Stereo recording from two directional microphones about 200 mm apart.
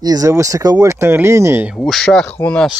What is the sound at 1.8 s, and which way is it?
Speech, centre (ahead or behind).